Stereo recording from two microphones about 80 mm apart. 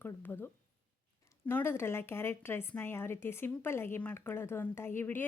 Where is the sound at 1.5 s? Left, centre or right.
Left.